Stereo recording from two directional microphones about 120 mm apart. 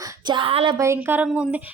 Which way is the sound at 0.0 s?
40° right (ahead or behind).